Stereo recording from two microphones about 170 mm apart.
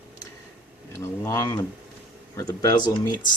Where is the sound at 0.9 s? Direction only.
15° left (ahead or behind).